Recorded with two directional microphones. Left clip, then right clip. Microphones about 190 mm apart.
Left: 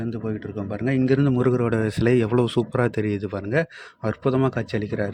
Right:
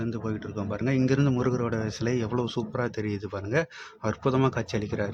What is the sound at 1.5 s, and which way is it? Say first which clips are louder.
Speech: left 7 dB; 30° left (ahead or behind).